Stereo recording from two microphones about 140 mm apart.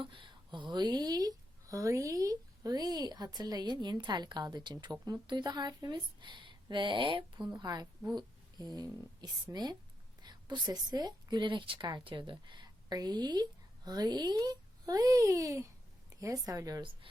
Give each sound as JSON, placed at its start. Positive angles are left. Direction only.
{"t": 0.0, "sound": "a woman's voice", "side_deg": -35}